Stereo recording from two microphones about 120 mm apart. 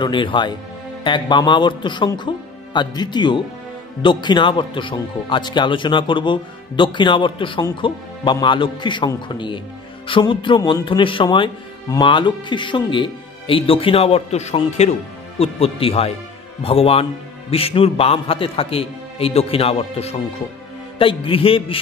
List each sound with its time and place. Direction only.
0.0 s speech: 40° left (ahead or behind)